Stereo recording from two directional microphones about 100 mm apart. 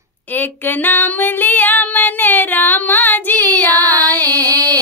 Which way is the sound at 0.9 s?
20° left (ahead or behind).